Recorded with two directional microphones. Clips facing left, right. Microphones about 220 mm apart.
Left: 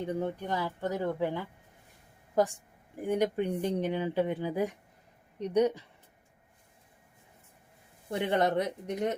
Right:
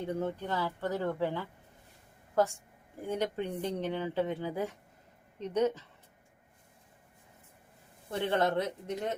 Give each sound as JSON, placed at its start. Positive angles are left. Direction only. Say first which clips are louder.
{"t": 0.0, "sound": "a woman's voice", "louder": "left 1 dB", "side_deg": 15}
{"t": 8.1, "sound": "speech", "louder": "left 2 dB", "side_deg": 15}